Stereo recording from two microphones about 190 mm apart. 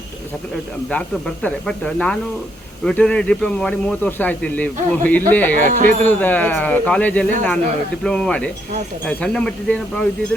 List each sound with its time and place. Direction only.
0.9 s speech: 5° left (ahead or behind)
5.6 s speech: 40° right (ahead or behind)
6.0 s speech: 10° left (ahead or behind)